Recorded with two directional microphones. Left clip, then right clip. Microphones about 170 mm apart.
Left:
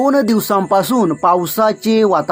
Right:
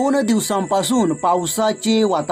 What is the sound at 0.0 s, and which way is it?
Speech, 25° left (ahead or behind).